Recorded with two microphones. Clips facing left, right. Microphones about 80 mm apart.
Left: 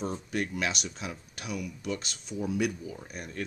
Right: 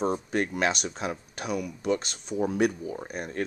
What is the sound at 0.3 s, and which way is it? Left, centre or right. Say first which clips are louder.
Speech: right 5 dB; right.